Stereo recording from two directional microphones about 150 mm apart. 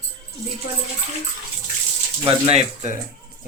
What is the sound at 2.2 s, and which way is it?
Speech, 40° right (ahead or behind).